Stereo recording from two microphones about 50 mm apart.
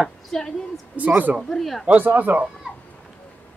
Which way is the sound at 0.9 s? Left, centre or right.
Right.